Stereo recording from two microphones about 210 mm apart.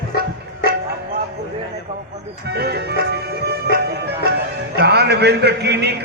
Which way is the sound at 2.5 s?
50° right (ahead or behind).